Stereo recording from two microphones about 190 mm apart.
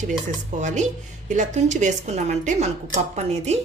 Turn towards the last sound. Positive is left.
turn(degrees=-35)  # may be behind; listen again after turning